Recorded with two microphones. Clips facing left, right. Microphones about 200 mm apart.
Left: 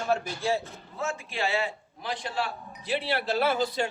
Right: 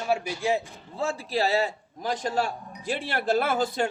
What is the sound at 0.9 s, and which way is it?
A man's voice, 30° right (ahead or behind).